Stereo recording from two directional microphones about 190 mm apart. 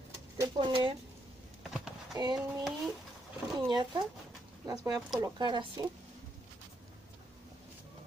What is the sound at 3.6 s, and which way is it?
Speech, 25° right (ahead or behind).